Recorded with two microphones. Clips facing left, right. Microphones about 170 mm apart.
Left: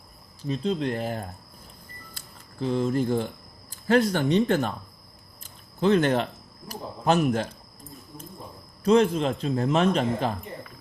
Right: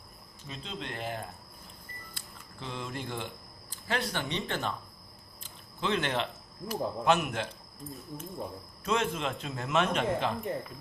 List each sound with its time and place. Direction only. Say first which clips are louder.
0.4 s a man's voice: left 14 dB; 40° left (ahead or behind)
2.1 s a sound: left 13 dB; 40° left (ahead or behind)
3.7 s speech: left 12 dB; 45° left (ahead or behind)
5.4 s a sound: left 10 dB; 45° left (ahead or behind)
6.7 s a man's voice: left 2 dB; 40° left (ahead or behind)
8.8 s a man's voice: left 10 dB; 35° left (ahead or behind)